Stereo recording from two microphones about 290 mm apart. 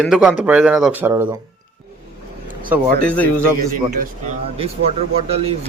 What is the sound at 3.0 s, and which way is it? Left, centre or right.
Speech, centre.